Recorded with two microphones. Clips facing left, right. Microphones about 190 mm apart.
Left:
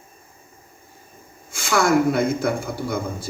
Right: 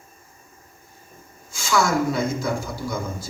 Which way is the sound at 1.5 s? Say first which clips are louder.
Left 3 dB; 60° left (ahead or behind).